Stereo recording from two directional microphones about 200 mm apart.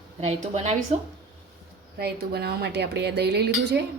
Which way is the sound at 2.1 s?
55° right (ahead or behind).